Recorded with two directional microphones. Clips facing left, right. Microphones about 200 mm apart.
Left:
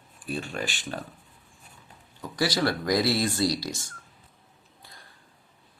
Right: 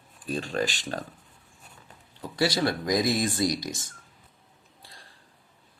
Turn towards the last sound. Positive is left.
turn(degrees=-30)  # may be behind; listen again after turning